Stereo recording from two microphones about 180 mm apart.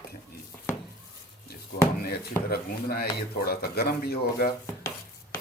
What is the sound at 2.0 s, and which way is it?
Speech, 55° left (ahead or behind).